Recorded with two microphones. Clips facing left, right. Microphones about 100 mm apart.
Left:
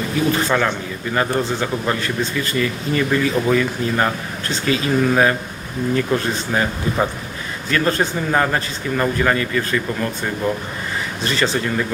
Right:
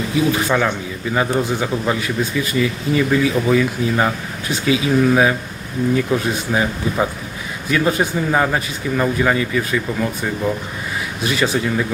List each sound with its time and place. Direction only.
0.3 s a man's voice: 10° right (ahead or behind)